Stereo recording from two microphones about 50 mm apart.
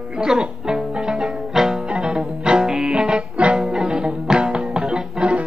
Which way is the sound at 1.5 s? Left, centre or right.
Centre.